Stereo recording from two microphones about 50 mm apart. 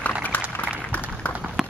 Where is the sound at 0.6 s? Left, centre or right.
Left.